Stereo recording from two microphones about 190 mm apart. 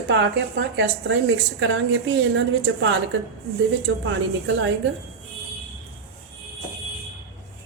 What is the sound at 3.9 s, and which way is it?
Speech, 75° right (ahead or behind).